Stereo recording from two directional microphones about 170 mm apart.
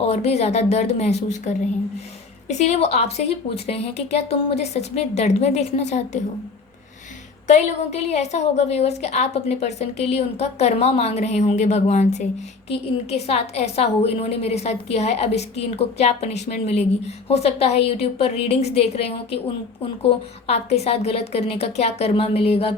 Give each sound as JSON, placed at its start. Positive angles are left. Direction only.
{"t": 0.0, "sound": "a woman's voice", "side_deg": 40}
{"t": 7.4, "sound": "a woman's voice", "side_deg": 40}